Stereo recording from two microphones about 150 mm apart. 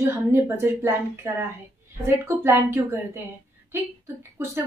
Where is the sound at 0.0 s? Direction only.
15° right (ahead or behind).